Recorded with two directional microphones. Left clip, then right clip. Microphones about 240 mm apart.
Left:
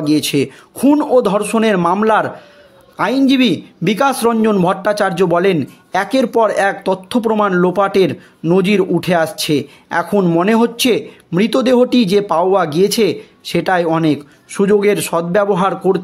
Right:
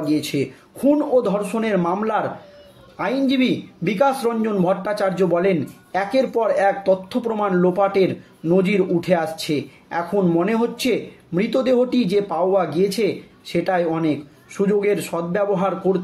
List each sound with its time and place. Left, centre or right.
0.0 s a man's voice: left